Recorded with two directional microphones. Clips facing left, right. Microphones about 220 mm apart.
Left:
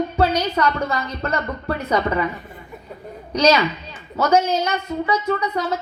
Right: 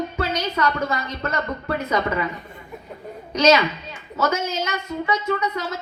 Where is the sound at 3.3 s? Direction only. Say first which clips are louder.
Even; 35° left (ahead or behind).